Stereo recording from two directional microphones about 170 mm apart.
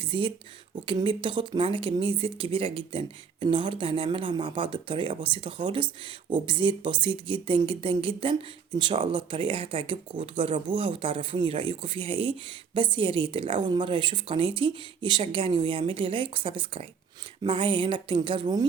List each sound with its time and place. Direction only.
0.0 s speech: 30° right (ahead or behind)